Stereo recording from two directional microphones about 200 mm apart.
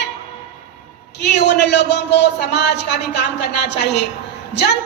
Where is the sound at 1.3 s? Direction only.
60° left (ahead or behind).